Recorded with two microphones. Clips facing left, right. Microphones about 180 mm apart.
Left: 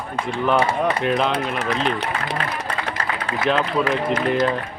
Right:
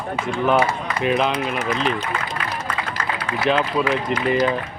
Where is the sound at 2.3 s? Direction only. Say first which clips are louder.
Left 1 dB; 35° left (ahead or behind).